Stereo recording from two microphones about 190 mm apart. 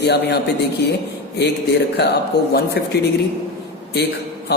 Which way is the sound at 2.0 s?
60° left (ahead or behind).